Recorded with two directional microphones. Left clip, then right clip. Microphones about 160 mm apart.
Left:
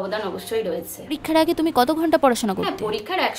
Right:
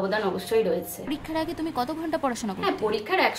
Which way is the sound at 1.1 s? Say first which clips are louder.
Left 11 dB; 40° left (ahead or behind).